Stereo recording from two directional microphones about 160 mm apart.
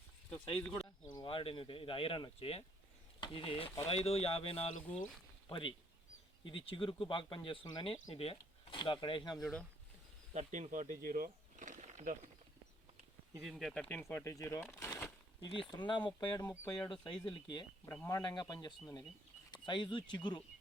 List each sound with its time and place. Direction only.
1.1 s speech: 30° left (ahead or behind)
4.9 s speech: 10° left (ahead or behind)
5.5 s speech: 30° left (ahead or behind)
9.4 s speech: 5° left (ahead or behind)
10.3 s speech: 50° right (ahead or behind)
11.0 s a sound: 60° right (ahead or behind)
13.4 s speech: centre (ahead or behind)
15.4 s speech: 30° left (ahead or behind)
16.5 s speech: 15° left (ahead or behind)
17.3 s speech: 30° left (ahead or behind)
17.8 s speech: 15° left (ahead or behind)
18.2 s speech: 25° left (ahead or behind)